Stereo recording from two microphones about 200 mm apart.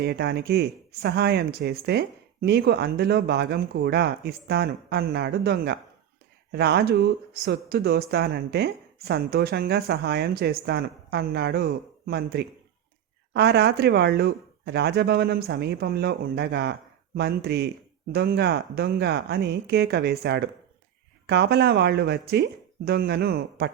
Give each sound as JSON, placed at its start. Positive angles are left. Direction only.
{"t": 0.0, "sound": "speech", "side_deg": -55}